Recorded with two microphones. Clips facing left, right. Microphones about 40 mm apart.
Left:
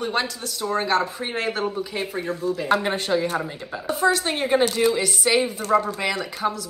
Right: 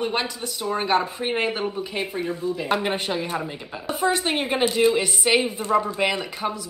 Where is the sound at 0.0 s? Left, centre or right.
Centre.